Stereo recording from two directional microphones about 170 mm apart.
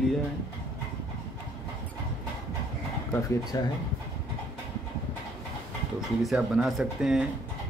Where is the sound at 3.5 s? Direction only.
20° left (ahead or behind).